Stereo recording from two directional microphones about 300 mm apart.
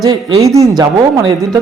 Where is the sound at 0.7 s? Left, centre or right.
Centre.